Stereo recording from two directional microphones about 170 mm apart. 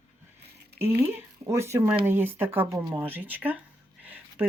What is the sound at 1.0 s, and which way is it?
Speech, 15° right (ahead or behind).